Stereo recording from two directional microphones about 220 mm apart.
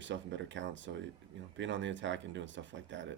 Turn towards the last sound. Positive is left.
turn(degrees=-55)  # may be behind; listen again after turning